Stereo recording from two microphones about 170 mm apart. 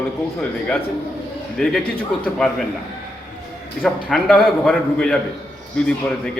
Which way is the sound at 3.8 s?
5° left (ahead or behind).